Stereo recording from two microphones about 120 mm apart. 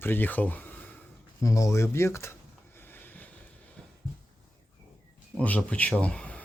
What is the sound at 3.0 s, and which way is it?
Vehicle, 15° left (ahead or behind).